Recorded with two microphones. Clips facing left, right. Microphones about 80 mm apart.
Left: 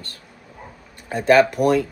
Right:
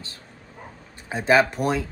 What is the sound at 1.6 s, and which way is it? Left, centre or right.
Speech, centre.